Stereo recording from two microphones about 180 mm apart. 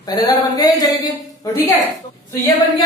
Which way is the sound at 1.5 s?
15° left (ahead or behind).